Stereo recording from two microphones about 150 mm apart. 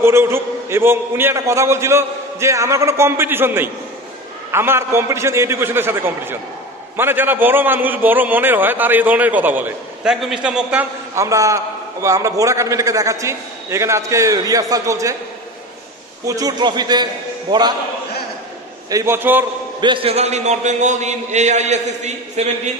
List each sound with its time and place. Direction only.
0.0 s a man's voice: 15° right (ahead or behind)
11.1 s a man's voice: 20° right (ahead or behind)
16.3 s a man's voice: 25° right (ahead or behind)
18.9 s a man's voice: 20° right (ahead or behind)
19.8 s a man's voice: 35° right (ahead or behind)